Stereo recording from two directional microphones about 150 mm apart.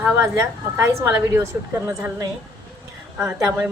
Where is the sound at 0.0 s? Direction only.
15° right (ahead or behind).